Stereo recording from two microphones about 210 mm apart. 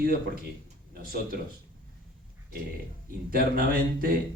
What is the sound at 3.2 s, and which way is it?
Speech, 45° right (ahead or behind).